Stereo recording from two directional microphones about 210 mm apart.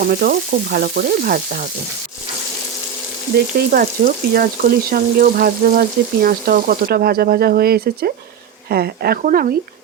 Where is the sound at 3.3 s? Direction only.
45° right (ahead or behind).